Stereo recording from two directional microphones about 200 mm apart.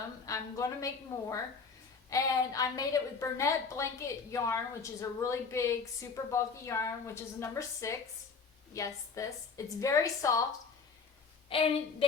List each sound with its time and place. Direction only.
0.3 s a woman's voice: 15° left (ahead or behind)
11.4 s a woman's voice: 30° left (ahead or behind)